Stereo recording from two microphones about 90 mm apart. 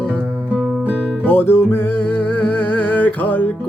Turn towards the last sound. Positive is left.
turn(degrees=20)  # may be behind; listen again after turning